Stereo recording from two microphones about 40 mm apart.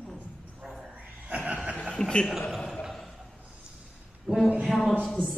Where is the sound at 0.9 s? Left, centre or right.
Right.